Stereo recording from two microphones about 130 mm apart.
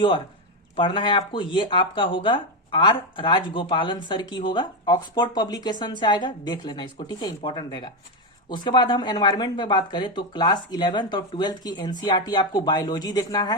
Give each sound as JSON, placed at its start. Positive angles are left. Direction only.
{"t": 0.8, "sound": "speech", "side_deg": 40}